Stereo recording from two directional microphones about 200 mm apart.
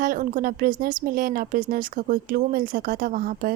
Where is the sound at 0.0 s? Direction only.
45° right (ahead or behind).